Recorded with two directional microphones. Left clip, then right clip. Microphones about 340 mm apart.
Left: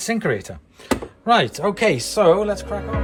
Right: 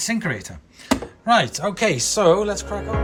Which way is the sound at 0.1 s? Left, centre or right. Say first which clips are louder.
Left 3 dB; centre.